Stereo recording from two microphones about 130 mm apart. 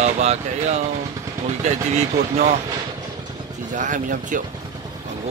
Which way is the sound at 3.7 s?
80° right.